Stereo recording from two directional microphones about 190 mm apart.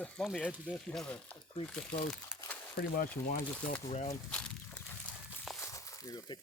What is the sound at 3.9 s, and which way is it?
Speech, 35° left (ahead or behind).